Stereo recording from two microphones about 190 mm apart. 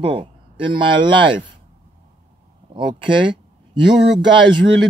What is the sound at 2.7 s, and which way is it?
Speech, 25° right (ahead or behind).